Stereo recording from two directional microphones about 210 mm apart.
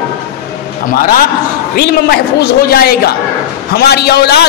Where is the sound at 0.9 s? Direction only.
45° left (ahead or behind).